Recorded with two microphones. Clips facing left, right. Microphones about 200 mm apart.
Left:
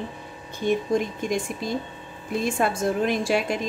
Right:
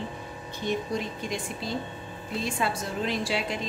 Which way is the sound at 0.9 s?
50° left (ahead or behind).